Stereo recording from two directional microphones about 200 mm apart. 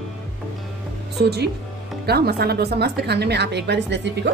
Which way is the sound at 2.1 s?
50° right (ahead or behind).